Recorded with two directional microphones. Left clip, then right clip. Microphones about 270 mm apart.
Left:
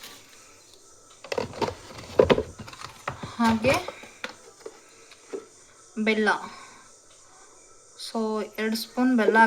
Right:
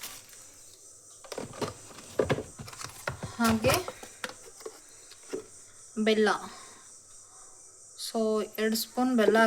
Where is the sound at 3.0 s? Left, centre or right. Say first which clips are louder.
Left 4 dB; right.